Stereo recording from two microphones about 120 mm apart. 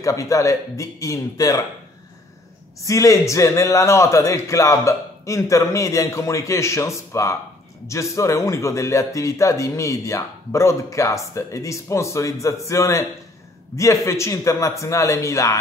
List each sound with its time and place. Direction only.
0.0 s speech: 25° left (ahead or behind)
2.8 s speech: 25° left (ahead or behind)
14.0 s speech: 25° left (ahead or behind)